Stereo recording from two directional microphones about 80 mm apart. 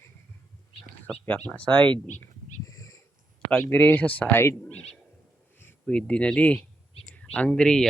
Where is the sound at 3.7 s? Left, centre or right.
Left.